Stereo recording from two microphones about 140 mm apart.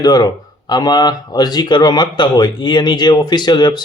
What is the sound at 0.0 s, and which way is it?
Speech, 30° left (ahead or behind).